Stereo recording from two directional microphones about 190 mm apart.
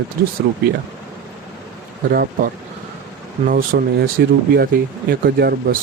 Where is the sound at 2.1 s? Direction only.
50° right (ahead or behind).